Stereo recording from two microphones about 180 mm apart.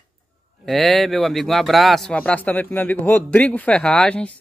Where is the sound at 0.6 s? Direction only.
Centre (ahead or behind).